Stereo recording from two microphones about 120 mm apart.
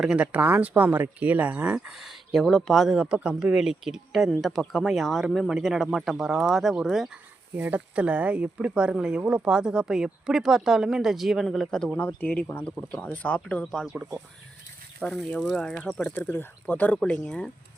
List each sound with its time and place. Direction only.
0.0 s speech: 10° right (ahead or behind)
2.0 s speech: centre (ahead or behind)
7.5 s speech: 15° right (ahead or behind); by 13.7 s 10° left (ahead or behind)
13.7 s speech: centre (ahead or behind)
15.0 s speech: 5° left (ahead or behind)